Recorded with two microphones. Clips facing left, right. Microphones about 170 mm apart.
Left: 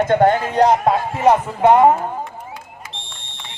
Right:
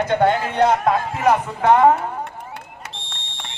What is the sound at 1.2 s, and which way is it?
Speech, 20° left (ahead or behind).